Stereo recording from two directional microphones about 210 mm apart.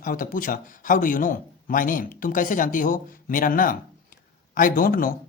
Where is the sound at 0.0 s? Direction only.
40° left (ahead or behind).